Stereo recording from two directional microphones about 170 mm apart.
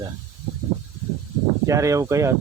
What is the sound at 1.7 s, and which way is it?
Speech, 20° right (ahead or behind).